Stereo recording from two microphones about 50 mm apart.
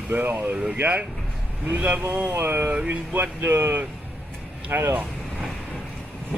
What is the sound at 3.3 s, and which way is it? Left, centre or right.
Speech, right.